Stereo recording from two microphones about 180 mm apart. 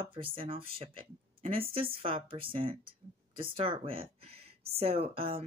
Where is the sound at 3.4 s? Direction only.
30° right (ahead or behind).